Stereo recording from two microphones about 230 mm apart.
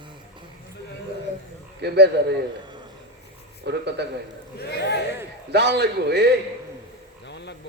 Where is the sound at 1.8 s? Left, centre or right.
Right.